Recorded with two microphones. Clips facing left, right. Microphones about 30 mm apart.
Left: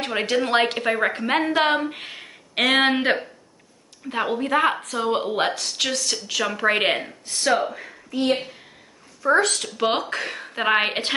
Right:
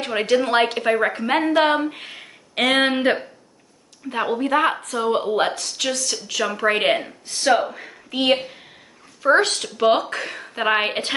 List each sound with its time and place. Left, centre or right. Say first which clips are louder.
0.0 s a woman's voice: right 3 dB; centre
8.1 s a woman's voice: right 3 dB; right
9.2 s speech: right 2 dB; right
9.8 s a woman's voice: right 5 dB; centre